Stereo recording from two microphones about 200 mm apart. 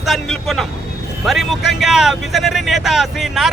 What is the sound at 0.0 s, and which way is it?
Speech, centre (ahead or behind).